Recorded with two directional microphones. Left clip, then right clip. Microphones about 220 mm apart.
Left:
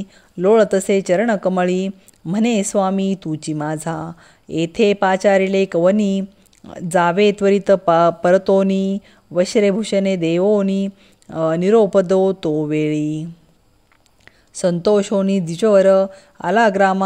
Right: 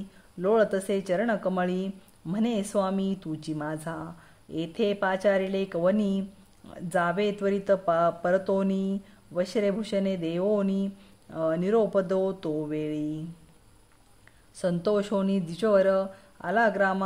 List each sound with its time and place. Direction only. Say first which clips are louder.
0.4 s speech: left 10 dB; 30° left (ahead or behind)
14.5 s speech: left 11 dB; 30° left (ahead or behind)